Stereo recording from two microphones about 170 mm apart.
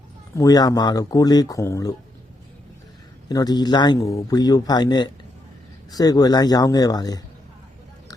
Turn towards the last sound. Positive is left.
turn(degrees=25)  # may be behind; listen again after turning